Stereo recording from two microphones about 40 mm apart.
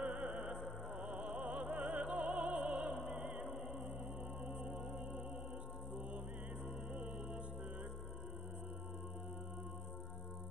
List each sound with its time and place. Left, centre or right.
0.2 s music: right
1.1 s music: right
1.4 s opera: right
3.1 s music: centre
4.5 s music: centre